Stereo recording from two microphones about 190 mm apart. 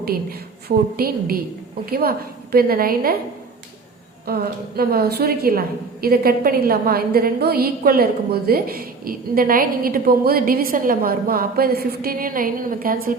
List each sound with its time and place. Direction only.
0.0 s a woman's voice: 50° right (ahead or behind)
4.3 s a woman's voice: 55° right (ahead or behind)